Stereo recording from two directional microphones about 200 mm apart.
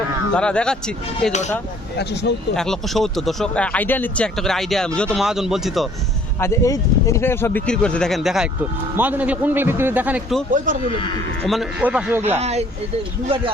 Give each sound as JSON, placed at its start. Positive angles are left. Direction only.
{"t": 0.3, "sound": "speech", "side_deg": 5}
{"t": 2.0, "sound": "speech", "side_deg": 55}
{"t": 2.6, "sound": "speech", "side_deg": 0}
{"t": 6.4, "sound": "a man's voice", "side_deg": 15}
{"t": 11.4, "sound": "a man's voice", "side_deg": 0}
{"t": 12.4, "sound": "speech", "side_deg": -30}